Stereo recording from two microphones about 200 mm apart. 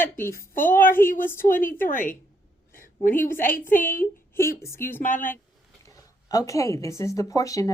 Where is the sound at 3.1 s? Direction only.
10° left (ahead or behind).